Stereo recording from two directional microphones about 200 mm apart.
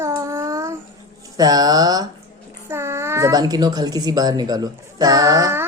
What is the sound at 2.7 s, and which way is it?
Speech, 10° right (ahead or behind).